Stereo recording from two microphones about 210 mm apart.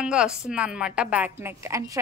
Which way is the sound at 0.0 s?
5° right (ahead or behind).